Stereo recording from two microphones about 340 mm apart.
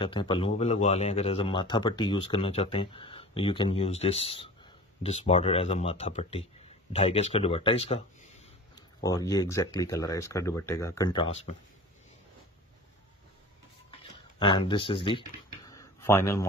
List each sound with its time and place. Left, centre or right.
0.0 s speech: centre
14.4 s speech: centre